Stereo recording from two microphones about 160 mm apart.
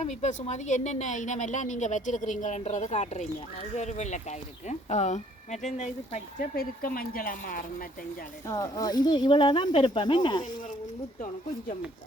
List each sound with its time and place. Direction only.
0.0 s a woman's voice: 45° left (ahead or behind)
6.6 s speech: 65° left (ahead or behind)
8.4 s speech: 20° left (ahead or behind)